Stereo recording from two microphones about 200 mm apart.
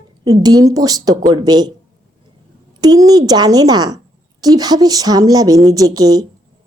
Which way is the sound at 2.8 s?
20° right (ahead or behind).